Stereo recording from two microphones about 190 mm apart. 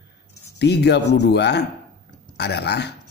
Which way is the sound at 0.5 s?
60° left (ahead or behind).